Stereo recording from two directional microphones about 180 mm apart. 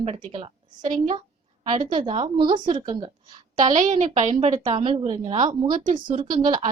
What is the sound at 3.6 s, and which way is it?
Speech, 45° right (ahead or behind).